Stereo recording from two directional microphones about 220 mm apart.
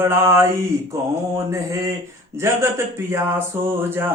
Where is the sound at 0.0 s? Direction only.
10° right (ahead or behind).